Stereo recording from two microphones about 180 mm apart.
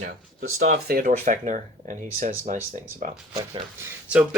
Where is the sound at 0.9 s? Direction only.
50° right (ahead or behind).